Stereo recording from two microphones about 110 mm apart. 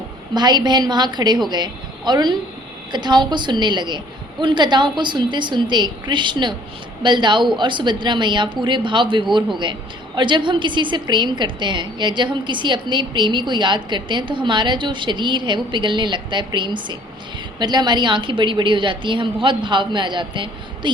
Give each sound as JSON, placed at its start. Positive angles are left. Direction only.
{"t": 0.3, "sound": "a woman's voice", "side_deg": -40}